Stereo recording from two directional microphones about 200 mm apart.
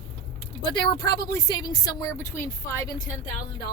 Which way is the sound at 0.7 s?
20° left (ahead or behind).